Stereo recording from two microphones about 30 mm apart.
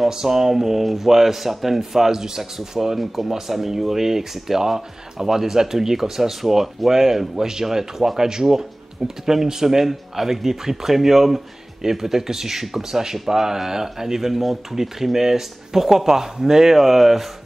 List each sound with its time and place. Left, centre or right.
0.1 s speech: centre